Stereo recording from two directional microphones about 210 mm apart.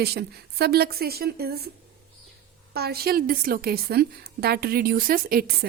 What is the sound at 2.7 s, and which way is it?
A woman's voice, 50° right (ahead or behind).